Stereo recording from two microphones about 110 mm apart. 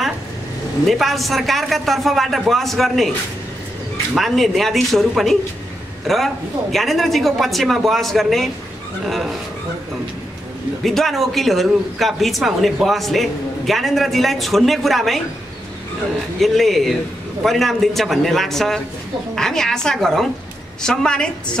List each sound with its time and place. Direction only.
0.8 s speech: centre (ahead or behind)
4.2 s speech: centre (ahead or behind)
10.8 s speech: centre (ahead or behind)
16.3 s a woman's voice: centre (ahead or behind)